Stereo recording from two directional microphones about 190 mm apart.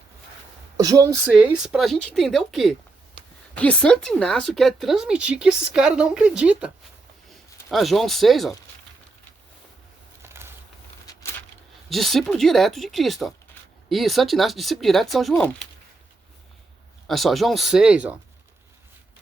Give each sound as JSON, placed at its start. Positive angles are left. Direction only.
{"t": 0.8, "sound": "a woman's voice", "side_deg": -20}
{"t": 1.3, "sound": "speech", "side_deg": -5}
{"t": 7.7, "sound": "speech", "side_deg": 0}
{"t": 10.2, "sound": "a sound", "side_deg": -15}
{"t": 11.0, "sound": "a sound", "side_deg": 20}
{"t": 11.9, "sound": "speech", "side_deg": 0}
{"t": 17.1, "sound": "speech", "side_deg": 0}